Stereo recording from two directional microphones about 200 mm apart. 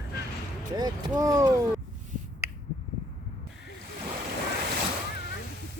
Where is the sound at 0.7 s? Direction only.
20° right (ahead or behind).